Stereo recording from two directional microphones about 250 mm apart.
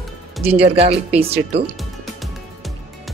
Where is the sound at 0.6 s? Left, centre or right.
Right.